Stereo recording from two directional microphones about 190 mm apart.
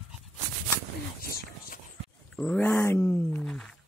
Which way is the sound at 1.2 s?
50° left (ahead or behind).